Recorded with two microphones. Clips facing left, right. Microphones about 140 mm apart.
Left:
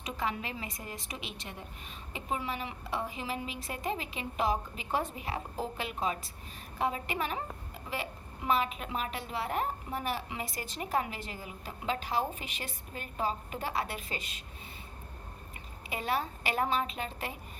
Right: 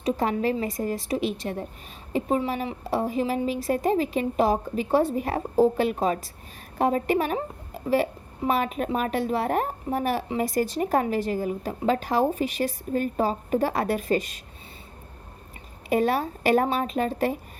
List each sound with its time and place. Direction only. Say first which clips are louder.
0.0 s a woman's voice: right 11 dB; 40° right (ahead or behind)
15.9 s a woman's voice: right 10 dB; 45° right (ahead or behind)